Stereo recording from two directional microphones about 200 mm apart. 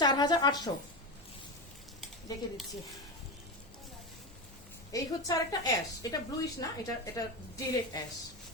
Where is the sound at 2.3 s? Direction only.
20° left (ahead or behind).